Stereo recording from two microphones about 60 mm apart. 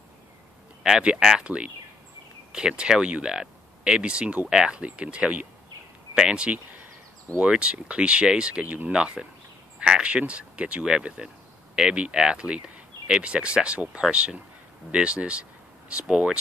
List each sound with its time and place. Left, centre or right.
0.8 s speech: centre